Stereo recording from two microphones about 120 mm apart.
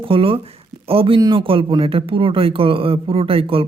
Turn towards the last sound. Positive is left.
turn(degrees=-50)  # may be behind; listen again after turning